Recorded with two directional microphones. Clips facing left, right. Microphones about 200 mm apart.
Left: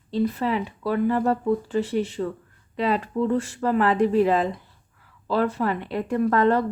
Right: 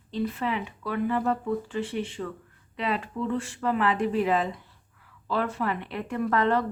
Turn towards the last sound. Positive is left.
turn(degrees=40)  # may be behind; listen again after turning